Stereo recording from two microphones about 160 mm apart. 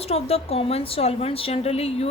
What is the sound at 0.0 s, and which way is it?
A woman's voice, 40° left (ahead or behind).